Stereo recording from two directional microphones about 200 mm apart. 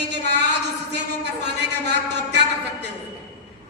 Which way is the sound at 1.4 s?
55° right (ahead or behind).